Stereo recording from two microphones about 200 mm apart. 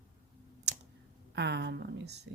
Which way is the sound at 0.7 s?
55° right (ahead or behind).